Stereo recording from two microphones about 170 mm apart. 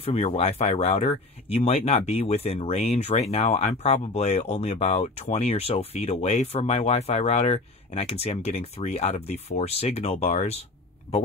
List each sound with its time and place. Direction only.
0.0 s speech: 40° left (ahead or behind)